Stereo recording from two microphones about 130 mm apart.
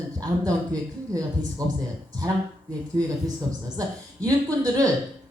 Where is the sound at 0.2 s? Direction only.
30° right (ahead or behind).